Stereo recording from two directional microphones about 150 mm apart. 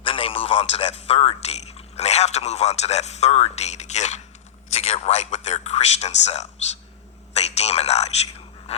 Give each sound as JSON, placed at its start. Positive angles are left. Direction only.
{"t": 0.0, "sound": "speech", "side_deg": 35}